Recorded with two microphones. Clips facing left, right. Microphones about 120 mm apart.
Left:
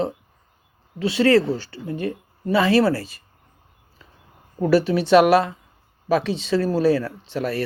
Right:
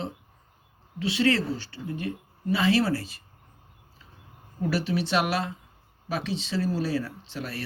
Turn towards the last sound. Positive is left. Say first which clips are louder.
# left 10 dB
turn(degrees=65)  # may be behind; listen again after turning